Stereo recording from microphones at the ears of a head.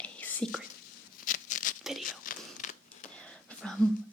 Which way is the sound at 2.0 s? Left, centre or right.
Left.